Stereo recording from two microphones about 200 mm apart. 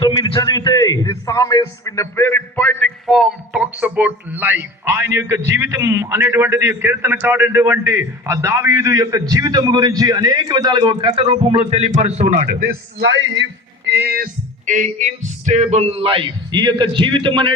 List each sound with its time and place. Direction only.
0.0 s a man's voice: 20° left (ahead or behind); by 12.5 s 35° right (ahead or behind)
13.0 s a man's voice: 65° right (ahead or behind)
14.7 s a sound: 40° right (ahead or behind)